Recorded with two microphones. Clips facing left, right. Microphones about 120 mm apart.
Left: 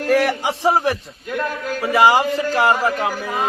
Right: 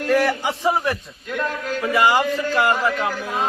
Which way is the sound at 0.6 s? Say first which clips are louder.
Left 4 dB; 30° left (ahead or behind).